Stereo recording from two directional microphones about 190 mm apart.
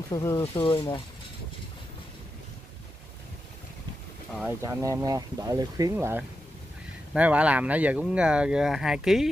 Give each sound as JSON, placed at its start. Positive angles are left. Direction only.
{"t": 0.1, "sound": "speech", "side_deg": 15}
{"t": 0.4, "sound": "speech", "side_deg": 30}
{"t": 4.5, "sound": "speech", "side_deg": -15}